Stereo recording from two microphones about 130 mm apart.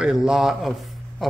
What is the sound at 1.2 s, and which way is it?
Pig, centre (ahead or behind).